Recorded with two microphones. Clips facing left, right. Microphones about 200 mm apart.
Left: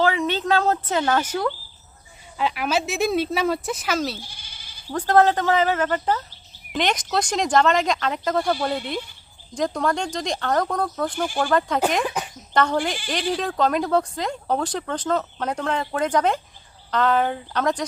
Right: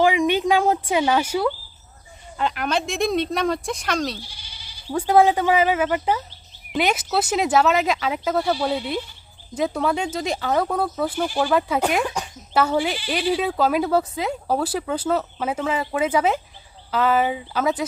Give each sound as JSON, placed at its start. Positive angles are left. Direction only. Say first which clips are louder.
{"t": 0.0, "sound": "speech", "louder": "right 3 dB", "side_deg": -15}
{"t": 2.4, "sound": "speech", "louder": "even", "side_deg": 5}
{"t": 4.2, "sound": "goat", "louder": "right 1 dB", "side_deg": 50}
{"t": 4.9, "sound": "speech", "louder": "right 1 dB", "side_deg": -10}